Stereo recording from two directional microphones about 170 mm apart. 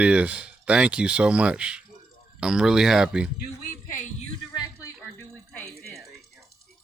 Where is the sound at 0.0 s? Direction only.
5° right (ahead or behind).